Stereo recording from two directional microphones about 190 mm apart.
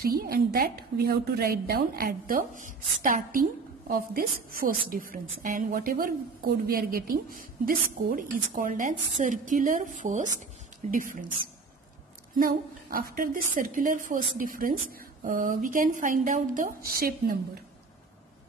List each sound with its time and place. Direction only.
0.0 s a woman's voice: 55° right (ahead or behind)
12.4 s a woman's voice: 50° right (ahead or behind)